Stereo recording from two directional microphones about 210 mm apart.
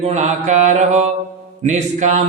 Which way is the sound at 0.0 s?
30° right (ahead or behind).